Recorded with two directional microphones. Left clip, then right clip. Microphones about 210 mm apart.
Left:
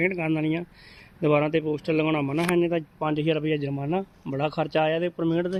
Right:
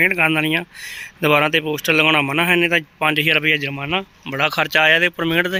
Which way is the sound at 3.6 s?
10° right (ahead or behind).